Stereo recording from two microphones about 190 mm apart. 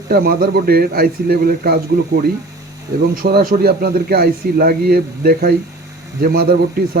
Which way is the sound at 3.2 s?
55° right (ahead or behind).